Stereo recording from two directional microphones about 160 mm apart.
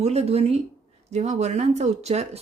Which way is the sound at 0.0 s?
40° right (ahead or behind).